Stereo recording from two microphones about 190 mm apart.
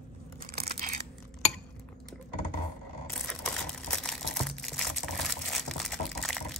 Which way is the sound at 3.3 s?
5° left (ahead or behind).